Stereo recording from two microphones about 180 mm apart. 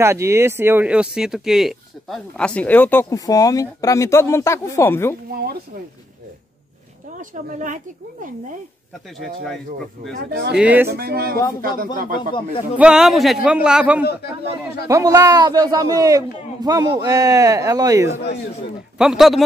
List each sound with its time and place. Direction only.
0.0 s speech: 15° right (ahead or behind); by 5.1 s 15° left (ahead or behind)
7.2 s speech: 45° right (ahead or behind)
9.2 s speech: centre (ahead or behind)
10.5 s music: 10° right (ahead or behind)
10.9 s music: 60° right (ahead or behind)
11.6 s speech: 50° right (ahead or behind)
12.3 s speech: 25° left (ahead or behind)
12.7 s speech: 5° right (ahead or behind)
14.9 s a man's voice: 20° right (ahead or behind)
18.9 s speech: centre (ahead or behind)